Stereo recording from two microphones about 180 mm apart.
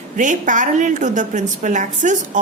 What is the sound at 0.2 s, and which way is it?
A woman's voice, 45° right (ahead or behind).